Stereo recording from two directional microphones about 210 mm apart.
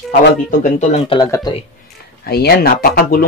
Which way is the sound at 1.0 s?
25° left (ahead or behind).